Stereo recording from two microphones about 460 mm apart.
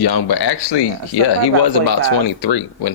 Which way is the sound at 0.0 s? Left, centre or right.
Left.